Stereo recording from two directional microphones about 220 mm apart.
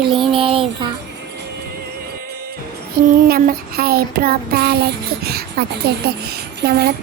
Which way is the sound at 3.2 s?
45° right (ahead or behind).